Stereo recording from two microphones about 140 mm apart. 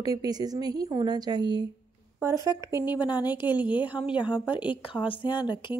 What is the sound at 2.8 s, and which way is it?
Speech, 30° left (ahead or behind).